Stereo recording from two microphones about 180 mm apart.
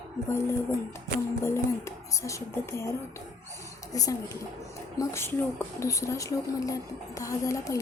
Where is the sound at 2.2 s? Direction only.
15° left (ahead or behind).